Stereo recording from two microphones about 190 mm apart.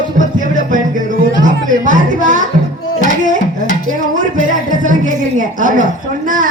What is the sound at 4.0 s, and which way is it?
A woman's voice, 40° right (ahead or behind).